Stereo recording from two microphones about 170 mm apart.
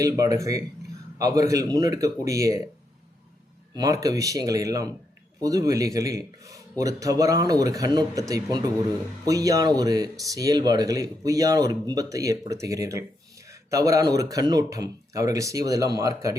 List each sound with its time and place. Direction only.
0.0 s speech: 20° right (ahead or behind)
3.8 s speech: 20° right (ahead or behind)